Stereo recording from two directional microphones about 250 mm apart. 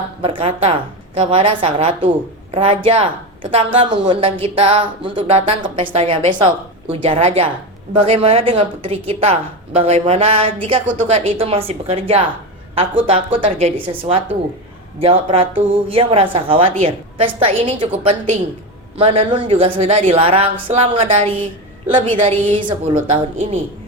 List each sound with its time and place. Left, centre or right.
0.2 s a woman's voice: right